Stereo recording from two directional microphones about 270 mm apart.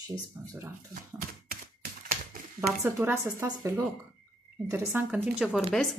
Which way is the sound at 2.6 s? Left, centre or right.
Centre.